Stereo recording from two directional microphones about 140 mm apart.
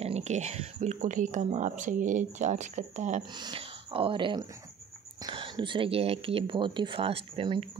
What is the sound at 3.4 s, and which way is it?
Speech, 40° right (ahead or behind).